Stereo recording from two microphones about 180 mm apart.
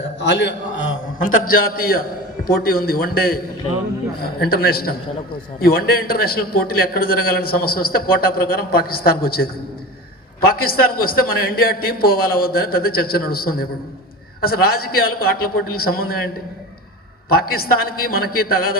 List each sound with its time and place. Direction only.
0.2 s a man's voice: 75° left (ahead or behind)
1.2 s a man's voice: 50° left (ahead or behind)